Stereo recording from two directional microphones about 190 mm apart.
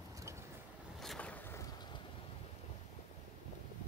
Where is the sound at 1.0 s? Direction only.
5° left (ahead or behind).